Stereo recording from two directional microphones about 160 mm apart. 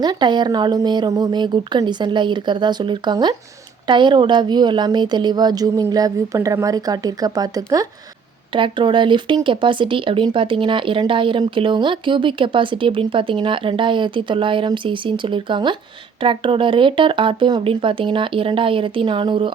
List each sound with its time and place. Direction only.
0.0 s a woman's voice: 25° right (ahead or behind)